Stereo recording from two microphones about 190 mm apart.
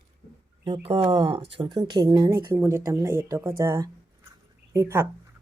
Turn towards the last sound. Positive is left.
turn(degrees=-15)  # may be behind; listen again after turning